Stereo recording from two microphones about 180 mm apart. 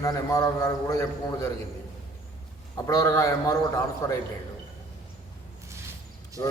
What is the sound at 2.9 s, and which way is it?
A man's voice, 20° left (ahead or behind).